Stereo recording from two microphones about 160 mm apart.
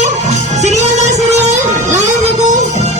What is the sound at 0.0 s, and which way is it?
Music, 45° right (ahead or behind).